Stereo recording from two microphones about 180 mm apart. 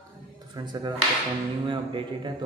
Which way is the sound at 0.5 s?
25° right (ahead or behind).